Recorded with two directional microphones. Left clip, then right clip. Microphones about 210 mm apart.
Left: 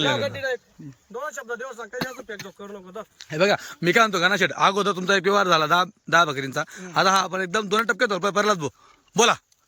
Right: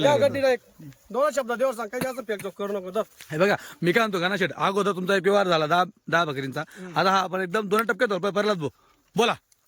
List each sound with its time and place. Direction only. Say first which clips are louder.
0.1 s speech: right 5 dB; 60° right (ahead or behind)
3.2 s a man's voice: left 4 dB; 15° right (ahead or behind)